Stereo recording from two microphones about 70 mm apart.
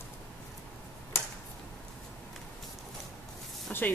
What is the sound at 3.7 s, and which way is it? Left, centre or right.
Speech, left.